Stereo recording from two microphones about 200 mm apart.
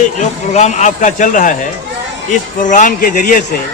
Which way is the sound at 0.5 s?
35° left (ahead or behind).